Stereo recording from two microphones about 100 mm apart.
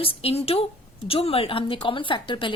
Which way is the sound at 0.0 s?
75° left (ahead or behind).